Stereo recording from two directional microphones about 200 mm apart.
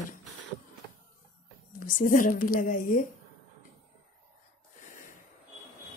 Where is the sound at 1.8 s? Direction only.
40° left (ahead or behind).